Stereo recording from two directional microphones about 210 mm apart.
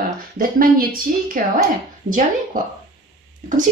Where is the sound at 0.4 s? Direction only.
45° right (ahead or behind).